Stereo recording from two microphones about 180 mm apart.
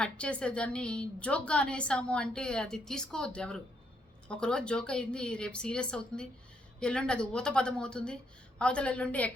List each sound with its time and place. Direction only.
0.0 s a woman's voice: 5° left (ahead or behind)